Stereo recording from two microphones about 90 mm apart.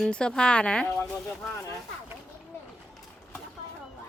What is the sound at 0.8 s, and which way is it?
Speech, 25° left (ahead or behind).